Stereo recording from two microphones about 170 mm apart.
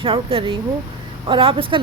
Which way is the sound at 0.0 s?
35° right (ahead or behind).